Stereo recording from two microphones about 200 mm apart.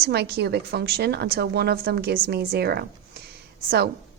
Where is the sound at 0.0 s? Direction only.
55° right (ahead or behind).